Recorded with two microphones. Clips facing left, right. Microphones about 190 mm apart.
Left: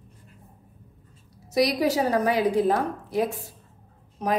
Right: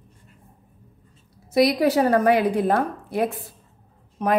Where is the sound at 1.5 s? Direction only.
60° right (ahead or behind).